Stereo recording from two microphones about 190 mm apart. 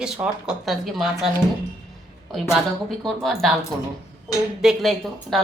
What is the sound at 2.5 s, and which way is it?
Speech, centre (ahead or behind).